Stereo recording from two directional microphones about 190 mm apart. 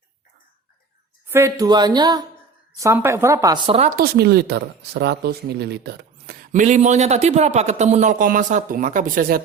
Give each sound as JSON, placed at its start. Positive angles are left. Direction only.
{"t": 1.3, "sound": "speech", "side_deg": -15}
{"t": 3.7, "sound": "speech", "side_deg": -35}
{"t": 3.9, "sound": "speech", "side_deg": -55}
{"t": 6.5, "sound": "speech", "side_deg": -40}